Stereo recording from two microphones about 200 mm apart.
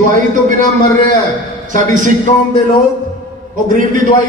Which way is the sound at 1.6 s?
40° right (ahead or behind).